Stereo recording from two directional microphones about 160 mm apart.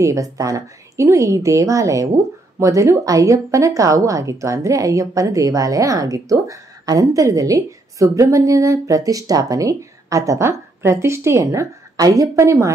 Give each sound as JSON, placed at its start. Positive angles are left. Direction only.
{"t": 0.0, "sound": "a woman's voice", "side_deg": -20}